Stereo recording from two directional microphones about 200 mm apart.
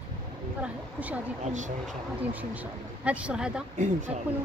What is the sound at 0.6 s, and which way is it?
Speech, 5° right (ahead or behind).